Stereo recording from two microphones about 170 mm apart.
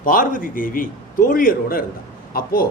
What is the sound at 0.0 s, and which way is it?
A man's voice, 55° left (ahead or behind).